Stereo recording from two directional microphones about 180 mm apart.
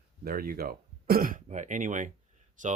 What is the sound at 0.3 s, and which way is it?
Speech, 55° right (ahead or behind).